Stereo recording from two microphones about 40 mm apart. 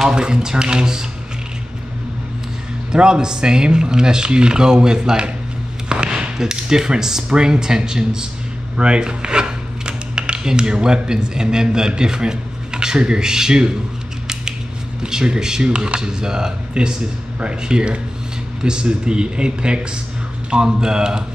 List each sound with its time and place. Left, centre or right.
0.1 s speech: right
2.9 s speech: centre
8.7 s rub: right
15.0 s speech: centre